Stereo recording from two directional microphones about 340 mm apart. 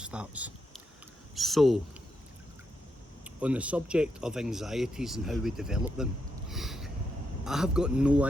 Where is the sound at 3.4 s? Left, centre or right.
Centre.